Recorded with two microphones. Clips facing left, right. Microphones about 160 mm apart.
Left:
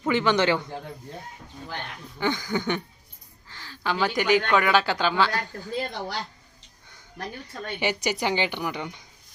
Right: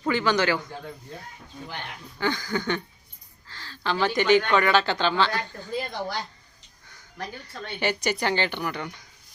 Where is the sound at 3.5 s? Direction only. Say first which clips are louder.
Even; 15° left (ahead or behind).